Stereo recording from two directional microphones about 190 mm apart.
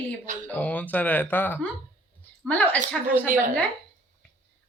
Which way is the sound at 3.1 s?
45° right (ahead or behind).